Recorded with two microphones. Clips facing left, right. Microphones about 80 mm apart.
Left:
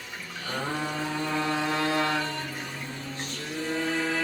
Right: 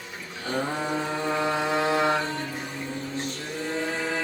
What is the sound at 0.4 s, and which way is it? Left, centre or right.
Mantra, centre.